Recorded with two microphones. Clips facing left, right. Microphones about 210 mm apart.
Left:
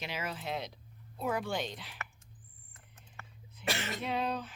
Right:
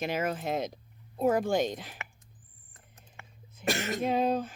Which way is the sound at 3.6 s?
45° right (ahead or behind).